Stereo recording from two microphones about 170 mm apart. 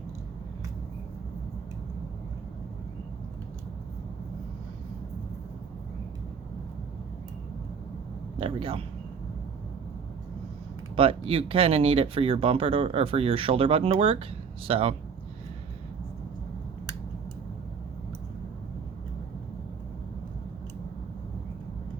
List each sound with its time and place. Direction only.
8.4 s speech: 35° right (ahead or behind)
10.9 s speech: 35° right (ahead or behind)